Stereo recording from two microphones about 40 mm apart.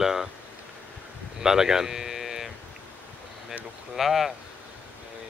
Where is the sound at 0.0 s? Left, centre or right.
Centre.